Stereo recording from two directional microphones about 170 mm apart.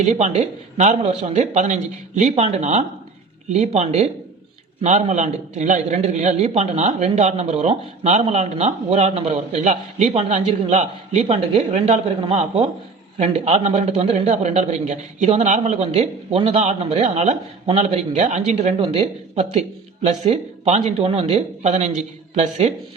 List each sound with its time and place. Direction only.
0.0 s a man's voice: 45° right (ahead or behind)